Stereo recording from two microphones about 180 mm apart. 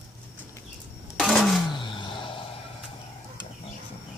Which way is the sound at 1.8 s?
25° left (ahead or behind).